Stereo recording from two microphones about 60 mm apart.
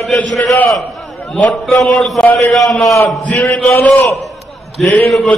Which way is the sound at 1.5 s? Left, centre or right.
Centre.